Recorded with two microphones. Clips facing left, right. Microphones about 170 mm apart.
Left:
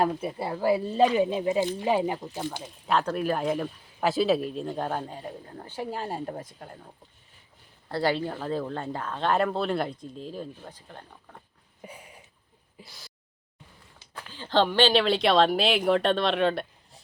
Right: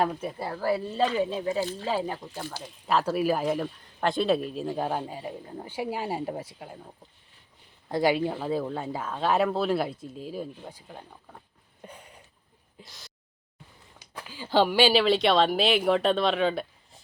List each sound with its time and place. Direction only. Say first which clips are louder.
0.0 s speech: left 1 dB; 5° left (ahead or behind)
2.6 s speech: right 1 dB; centre (ahead or behind)
11.8 s a sound: left 1 dB; 10° left (ahead or behind)
12.7 s speech: left 1 dB; centre (ahead or behind)
14.0 s speech: right 1 dB; 10° right (ahead or behind)